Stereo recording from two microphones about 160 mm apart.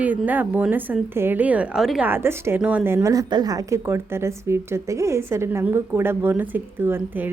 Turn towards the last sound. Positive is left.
turn(degrees=-10)  # may be behind; listen again after turning